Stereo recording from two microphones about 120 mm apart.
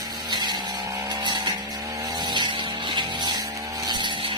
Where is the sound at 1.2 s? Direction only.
35° right (ahead or behind).